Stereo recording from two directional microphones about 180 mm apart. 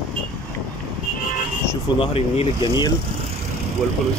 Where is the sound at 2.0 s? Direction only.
30° left (ahead or behind).